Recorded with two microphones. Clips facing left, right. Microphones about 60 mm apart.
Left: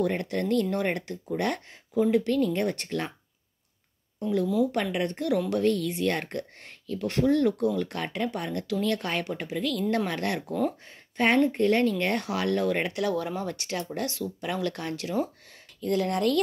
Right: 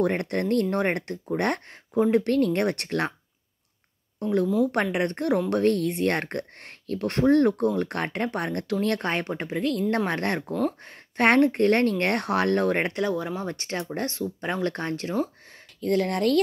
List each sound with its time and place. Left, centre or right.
0.0 s speech: right
2.2 s speech: right
4.2 s speech: right
10.8 s speech: right
13.0 s speech: right
15.8 s speech: right